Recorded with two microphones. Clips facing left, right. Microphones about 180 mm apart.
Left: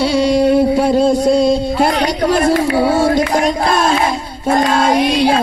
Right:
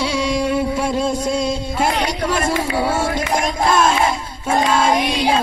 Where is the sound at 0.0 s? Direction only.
35° left (ahead or behind).